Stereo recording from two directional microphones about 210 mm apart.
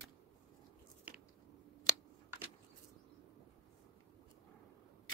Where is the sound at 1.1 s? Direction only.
5° right (ahead or behind).